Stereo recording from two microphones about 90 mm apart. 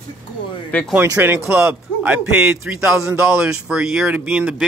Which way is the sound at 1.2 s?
25° right (ahead or behind).